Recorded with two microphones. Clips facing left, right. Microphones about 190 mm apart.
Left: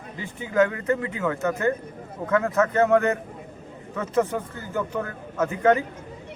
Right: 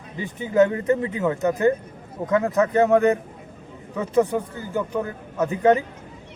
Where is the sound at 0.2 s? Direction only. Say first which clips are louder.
Right 3 dB; 20° right (ahead or behind).